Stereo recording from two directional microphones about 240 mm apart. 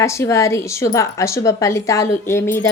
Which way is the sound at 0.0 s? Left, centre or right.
Centre.